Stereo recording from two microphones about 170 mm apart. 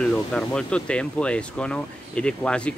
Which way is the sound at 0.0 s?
5° left (ahead or behind).